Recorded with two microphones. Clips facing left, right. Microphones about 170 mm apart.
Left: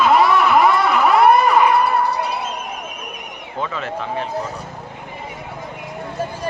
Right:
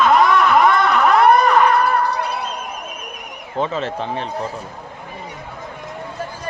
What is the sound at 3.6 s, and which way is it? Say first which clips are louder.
Speech: right 3 dB; 30° right (ahead or behind).